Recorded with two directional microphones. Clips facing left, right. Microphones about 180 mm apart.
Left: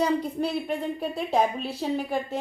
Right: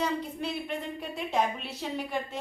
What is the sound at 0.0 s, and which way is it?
A woman's voice, 40° left (ahead or behind).